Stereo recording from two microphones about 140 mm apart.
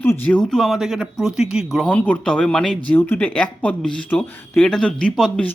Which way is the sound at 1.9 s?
10° left (ahead or behind).